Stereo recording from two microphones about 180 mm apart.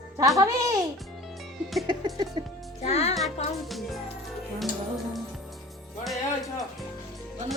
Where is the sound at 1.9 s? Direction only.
20° right (ahead or behind).